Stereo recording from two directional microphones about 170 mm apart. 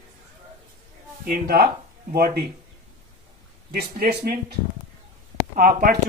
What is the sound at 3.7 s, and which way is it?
Speech, 60° right (ahead or behind).